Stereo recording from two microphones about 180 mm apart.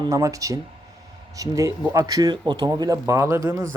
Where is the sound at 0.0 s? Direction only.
20° right (ahead or behind).